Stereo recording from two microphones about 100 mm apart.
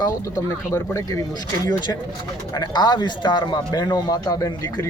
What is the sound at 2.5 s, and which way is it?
A man's voice, 45° left (ahead or behind).